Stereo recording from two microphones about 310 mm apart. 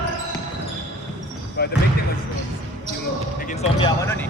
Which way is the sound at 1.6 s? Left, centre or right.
Left.